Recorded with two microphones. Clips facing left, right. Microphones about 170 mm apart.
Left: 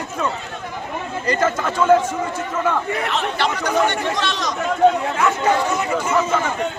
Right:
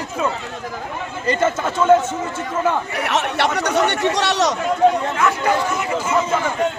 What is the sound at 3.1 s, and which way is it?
Speech, 70° right (ahead or behind).